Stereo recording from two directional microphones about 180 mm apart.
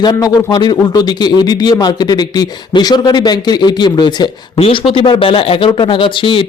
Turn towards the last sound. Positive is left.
turn(degrees=30)  # may be behind; listen again after turning